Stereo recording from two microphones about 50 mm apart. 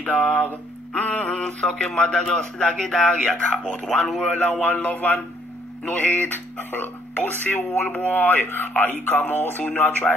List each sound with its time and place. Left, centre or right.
0.0 s speech: left
6.2 s speech: left